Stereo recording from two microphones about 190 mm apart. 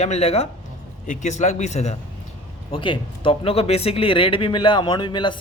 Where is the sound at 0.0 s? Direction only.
35° left (ahead or behind).